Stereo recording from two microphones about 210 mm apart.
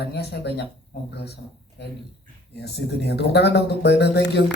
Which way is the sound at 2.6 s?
50° left (ahead or behind).